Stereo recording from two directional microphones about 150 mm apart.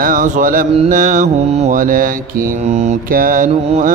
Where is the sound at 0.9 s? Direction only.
55° right (ahead or behind).